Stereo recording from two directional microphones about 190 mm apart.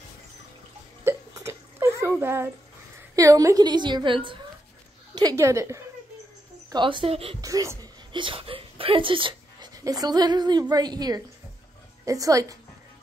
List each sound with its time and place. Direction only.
1.0 s hiccup: 15° right (ahead or behind)
3.2 s a woman's voice: 15° right (ahead or behind)
7.4 s a woman's voice: 15° right (ahead or behind)